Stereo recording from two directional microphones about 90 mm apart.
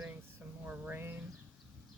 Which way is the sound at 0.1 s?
20° right (ahead or behind).